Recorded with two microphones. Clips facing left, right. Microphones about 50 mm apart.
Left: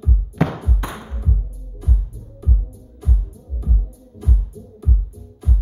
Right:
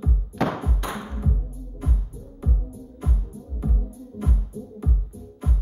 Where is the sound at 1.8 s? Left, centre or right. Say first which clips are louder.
Left 2 dB; right.